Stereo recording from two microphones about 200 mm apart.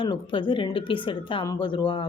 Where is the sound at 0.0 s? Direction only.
25° left (ahead or behind).